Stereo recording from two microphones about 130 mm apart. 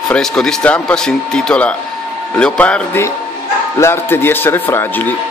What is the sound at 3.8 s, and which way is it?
Speech, 20° left (ahead or behind).